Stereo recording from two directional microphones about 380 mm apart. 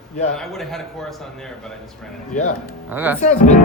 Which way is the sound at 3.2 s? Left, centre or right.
Centre.